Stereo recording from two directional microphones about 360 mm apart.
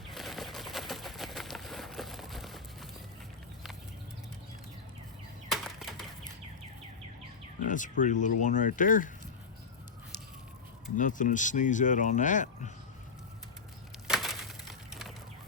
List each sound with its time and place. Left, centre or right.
0.1 s pigeon: centre
5.5 s typewriter: centre
7.7 s speech: left
10.9 s speech: left
14.1 s a sound: centre